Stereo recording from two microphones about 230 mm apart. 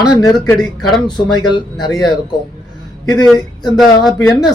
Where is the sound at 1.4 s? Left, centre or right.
Centre.